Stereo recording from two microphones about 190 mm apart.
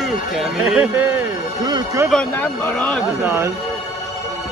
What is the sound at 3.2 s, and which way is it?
Speech, 10° right (ahead or behind).